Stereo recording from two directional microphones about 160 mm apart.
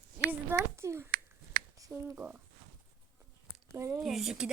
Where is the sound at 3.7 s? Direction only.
15° right (ahead or behind).